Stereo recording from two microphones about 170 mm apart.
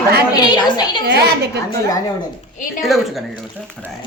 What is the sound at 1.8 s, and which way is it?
Speech, 20° left (ahead or behind).